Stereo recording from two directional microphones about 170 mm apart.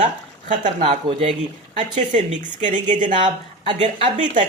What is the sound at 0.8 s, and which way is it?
Speech, 35° right (ahead or behind).